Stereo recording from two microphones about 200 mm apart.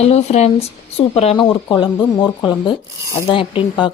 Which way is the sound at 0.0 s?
30° left (ahead or behind).